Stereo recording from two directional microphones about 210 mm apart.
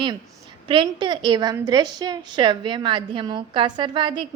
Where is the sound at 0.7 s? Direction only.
20° right (ahead or behind).